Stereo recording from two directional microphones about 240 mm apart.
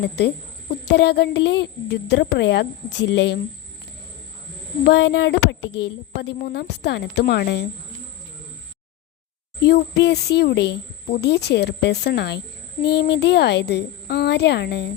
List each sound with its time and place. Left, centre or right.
0.7 s a woman's voice: left
4.8 s a woman's voice: left
9.6 s a woman's voice: left